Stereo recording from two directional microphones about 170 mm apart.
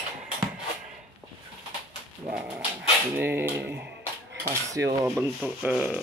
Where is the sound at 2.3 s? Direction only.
10° right (ahead or behind).